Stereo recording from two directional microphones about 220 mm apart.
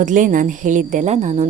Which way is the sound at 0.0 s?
35° right (ahead or behind).